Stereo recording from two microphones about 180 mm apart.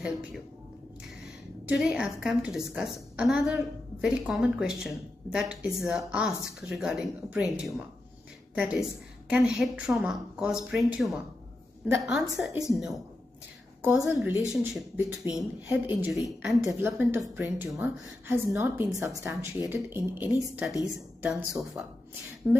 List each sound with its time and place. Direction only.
1.2 s a woman's voice: 5° right (ahead or behind)
16.8 s a woman's voice: 15° right (ahead or behind)